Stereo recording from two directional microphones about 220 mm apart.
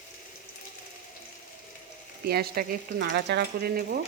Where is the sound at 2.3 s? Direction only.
45° right (ahead or behind).